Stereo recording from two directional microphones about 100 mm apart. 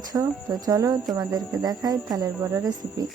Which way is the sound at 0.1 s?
35° right (ahead or behind).